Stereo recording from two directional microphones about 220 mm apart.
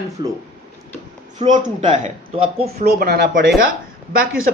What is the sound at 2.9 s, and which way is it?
Speech, 45° right (ahead or behind).